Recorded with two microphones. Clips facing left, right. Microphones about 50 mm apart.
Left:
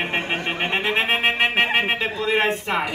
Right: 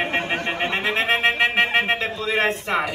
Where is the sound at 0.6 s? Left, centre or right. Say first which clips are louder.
Left 2 dB; left.